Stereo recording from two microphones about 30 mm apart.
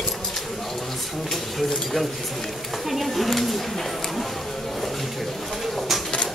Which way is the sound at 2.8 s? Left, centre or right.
Centre.